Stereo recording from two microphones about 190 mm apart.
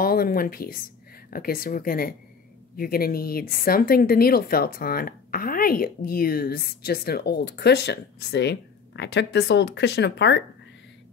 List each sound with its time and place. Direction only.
0.0 s speech: 50° left (ahead or behind); by 10.4 s 65° left (ahead or behind)